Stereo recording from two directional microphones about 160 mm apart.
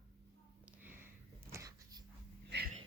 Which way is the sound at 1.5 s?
20° right (ahead or behind).